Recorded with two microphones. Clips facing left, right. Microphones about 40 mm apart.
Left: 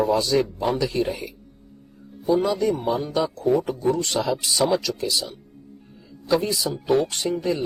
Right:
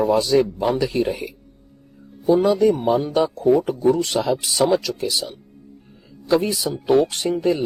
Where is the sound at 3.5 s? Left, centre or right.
Centre.